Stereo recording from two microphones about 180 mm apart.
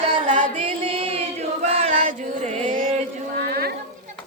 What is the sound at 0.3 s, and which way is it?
Music, 45° right (ahead or behind).